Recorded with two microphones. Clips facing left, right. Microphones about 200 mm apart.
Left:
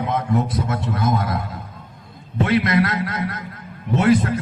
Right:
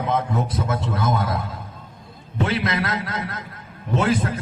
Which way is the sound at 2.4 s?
25° right (ahead or behind).